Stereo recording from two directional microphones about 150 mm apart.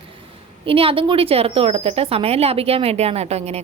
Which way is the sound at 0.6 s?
35° right (ahead or behind).